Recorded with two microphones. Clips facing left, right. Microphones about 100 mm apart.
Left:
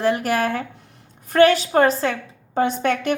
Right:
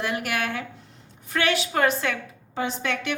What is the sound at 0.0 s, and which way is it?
Speech, 35° left (ahead or behind).